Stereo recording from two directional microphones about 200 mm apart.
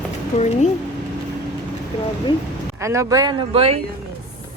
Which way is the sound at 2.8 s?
15° right (ahead or behind).